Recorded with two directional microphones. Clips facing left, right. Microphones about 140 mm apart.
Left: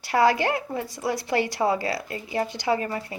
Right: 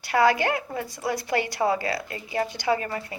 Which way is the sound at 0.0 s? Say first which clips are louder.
Even; 35° left (ahead or behind).